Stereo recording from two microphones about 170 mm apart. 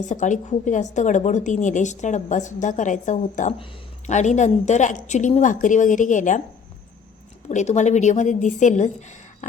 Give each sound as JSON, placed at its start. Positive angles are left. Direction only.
{"t": 0.0, "sound": "a woman's voice", "side_deg": 45}
{"t": 7.4, "sound": "a woman's voice", "side_deg": 40}